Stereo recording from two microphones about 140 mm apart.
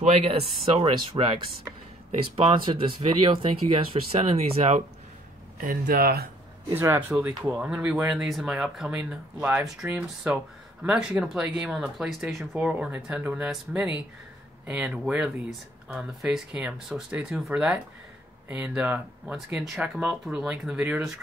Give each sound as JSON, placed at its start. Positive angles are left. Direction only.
{"t": 0.0, "sound": "speech", "side_deg": -50}
{"t": 2.3, "sound": "speech", "side_deg": -40}
{"t": 5.6, "sound": "speech", "side_deg": -85}
{"t": 6.7, "sound": "speech", "side_deg": -15}
{"t": 18.5, "sound": "speech", "side_deg": -5}